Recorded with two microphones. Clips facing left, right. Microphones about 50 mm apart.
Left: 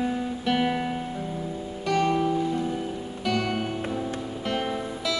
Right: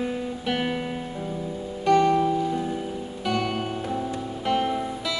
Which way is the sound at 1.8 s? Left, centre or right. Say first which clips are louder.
Right 5 dB; centre.